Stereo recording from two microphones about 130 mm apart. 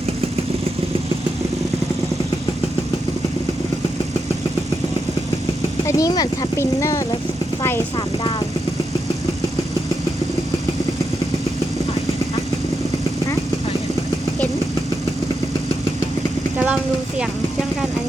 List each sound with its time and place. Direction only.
5.8 s speech: 25° left (ahead or behind)
7.9 s speech: 40° left (ahead or behind)